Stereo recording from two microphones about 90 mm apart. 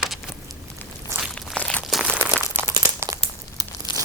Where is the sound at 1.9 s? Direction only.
Centre (ahead or behind).